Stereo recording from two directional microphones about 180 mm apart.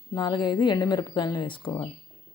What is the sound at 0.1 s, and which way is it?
Speech, 25° left (ahead or behind).